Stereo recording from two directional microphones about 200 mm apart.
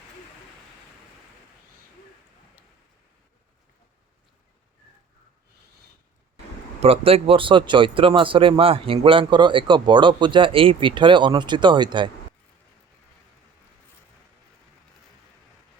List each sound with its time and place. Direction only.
6.7 s speech: 30° right (ahead or behind)